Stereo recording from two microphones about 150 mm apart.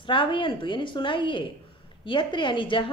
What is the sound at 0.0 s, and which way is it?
A woman's voice, 35° left (ahead or behind).